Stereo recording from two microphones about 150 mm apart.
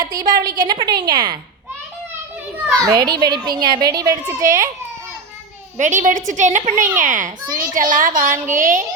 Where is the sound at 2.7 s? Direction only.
25° right (ahead or behind).